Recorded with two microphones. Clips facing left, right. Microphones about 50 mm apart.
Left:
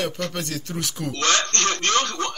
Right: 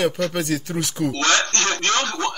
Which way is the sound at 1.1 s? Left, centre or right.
Right.